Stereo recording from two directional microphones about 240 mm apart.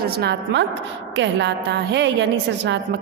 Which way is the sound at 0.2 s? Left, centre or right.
Right.